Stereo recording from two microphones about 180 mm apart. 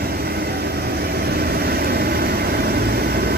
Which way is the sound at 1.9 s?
60° right (ahead or behind).